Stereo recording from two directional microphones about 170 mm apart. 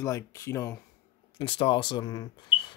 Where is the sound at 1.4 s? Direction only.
30° left (ahead or behind).